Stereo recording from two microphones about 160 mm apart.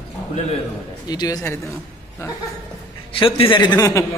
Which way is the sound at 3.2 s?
35° left (ahead or behind).